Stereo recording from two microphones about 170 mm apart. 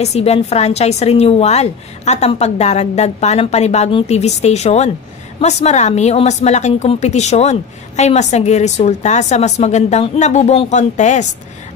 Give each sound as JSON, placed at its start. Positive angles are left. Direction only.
{"t": 0.0, "sound": "a woman's voice", "side_deg": 40}